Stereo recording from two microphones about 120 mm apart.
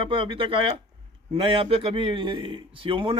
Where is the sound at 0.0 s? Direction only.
45° right (ahead or behind).